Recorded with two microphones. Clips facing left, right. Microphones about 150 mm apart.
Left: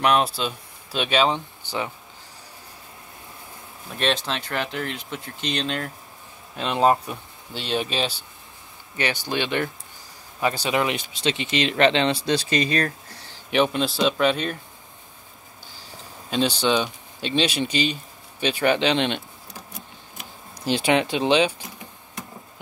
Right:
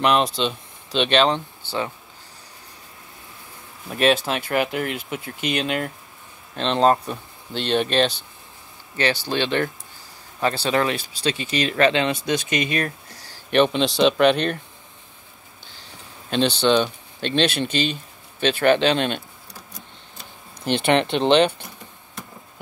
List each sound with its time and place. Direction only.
0.0 s speech: 5° left (ahead or behind)
3.9 s speech: 5° right (ahead or behind)
6.5 s speech: 10° left (ahead or behind); by 12.9 s 35° left (ahead or behind)
13.6 s speech: 5° left (ahead or behind)
14.3 s speech: 70° right (ahead or behind)
16.3 s speech: 10° left (ahead or behind)
20.5 s speech: 60° right (ahead or behind)